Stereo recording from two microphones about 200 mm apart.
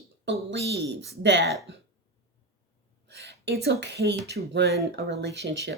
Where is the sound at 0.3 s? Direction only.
60° right (ahead or behind).